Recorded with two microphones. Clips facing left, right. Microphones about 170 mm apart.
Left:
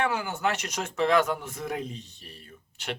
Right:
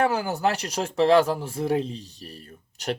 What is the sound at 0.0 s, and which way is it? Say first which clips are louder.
Speech: right 5 dB; 35° right (ahead or behind).